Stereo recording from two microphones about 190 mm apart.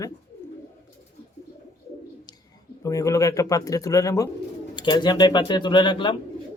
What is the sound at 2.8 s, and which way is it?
Speech, 15° left (ahead or behind).